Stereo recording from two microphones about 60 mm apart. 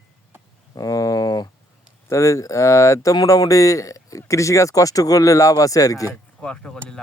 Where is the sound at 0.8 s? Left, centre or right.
Left.